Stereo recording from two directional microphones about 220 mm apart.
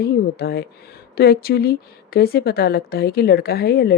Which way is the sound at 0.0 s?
45° left (ahead or behind).